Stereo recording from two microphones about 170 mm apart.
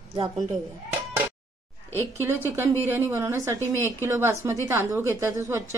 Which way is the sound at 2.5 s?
15° right (ahead or behind).